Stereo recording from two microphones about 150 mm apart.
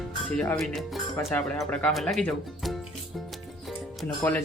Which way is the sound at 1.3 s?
10° left (ahead or behind).